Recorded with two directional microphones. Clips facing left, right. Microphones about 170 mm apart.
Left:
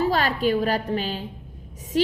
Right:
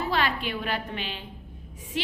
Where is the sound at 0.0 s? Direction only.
40° left (ahead or behind).